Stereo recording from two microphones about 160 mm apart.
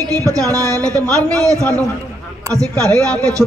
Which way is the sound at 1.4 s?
20° right (ahead or behind).